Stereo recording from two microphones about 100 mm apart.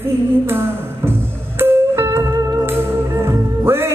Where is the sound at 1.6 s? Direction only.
25° right (ahead or behind).